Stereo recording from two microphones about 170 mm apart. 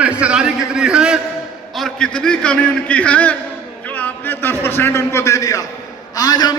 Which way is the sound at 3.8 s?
10° left (ahead or behind).